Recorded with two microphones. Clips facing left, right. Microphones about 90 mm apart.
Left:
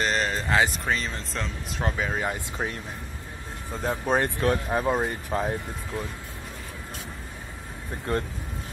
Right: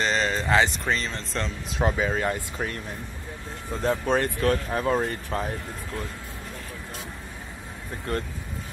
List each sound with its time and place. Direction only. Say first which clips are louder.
0.0 s speech: right 1 dB; 5° left (ahead or behind)
2.1 s speech: right 2 dB; 15° left (ahead or behind)
3.7 s speech: right 3 dB; 5° left (ahead or behind)
4.1 s speech: left 2 dB; 20° left (ahead or behind)